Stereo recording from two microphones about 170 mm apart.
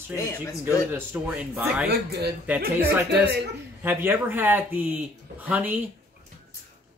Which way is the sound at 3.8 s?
15° right (ahead or behind).